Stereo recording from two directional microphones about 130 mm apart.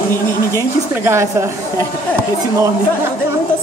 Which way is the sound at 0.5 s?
20° right (ahead or behind).